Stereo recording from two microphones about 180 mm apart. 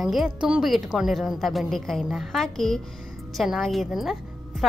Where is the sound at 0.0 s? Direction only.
Centre (ahead or behind).